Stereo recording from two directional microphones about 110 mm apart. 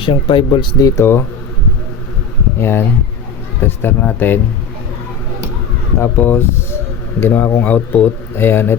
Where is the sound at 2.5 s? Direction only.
20° left (ahead or behind).